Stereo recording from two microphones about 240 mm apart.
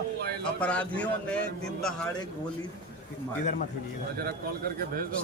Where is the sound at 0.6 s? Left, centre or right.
Centre.